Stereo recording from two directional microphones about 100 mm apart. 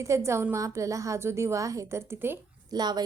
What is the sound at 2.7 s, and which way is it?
Speech, 45° right (ahead or behind).